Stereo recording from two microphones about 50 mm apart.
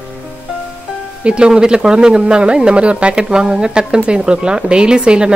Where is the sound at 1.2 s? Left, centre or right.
Centre.